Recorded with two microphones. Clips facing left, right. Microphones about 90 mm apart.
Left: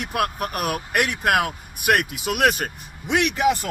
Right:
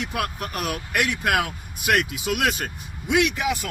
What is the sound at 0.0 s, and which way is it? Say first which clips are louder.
Speech: left 4 dB; 50° left (ahead or behind).